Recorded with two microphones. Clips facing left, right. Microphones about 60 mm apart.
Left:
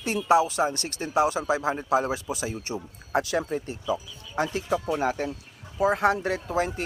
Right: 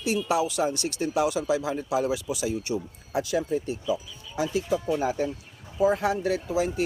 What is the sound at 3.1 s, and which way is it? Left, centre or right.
Speech, left.